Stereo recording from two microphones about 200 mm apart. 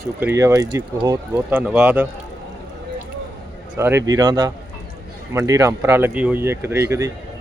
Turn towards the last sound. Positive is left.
turn(degrees=-15)  # may be behind; listen again after turning